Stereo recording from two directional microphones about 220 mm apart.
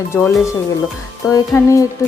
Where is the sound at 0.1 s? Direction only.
10° left (ahead or behind).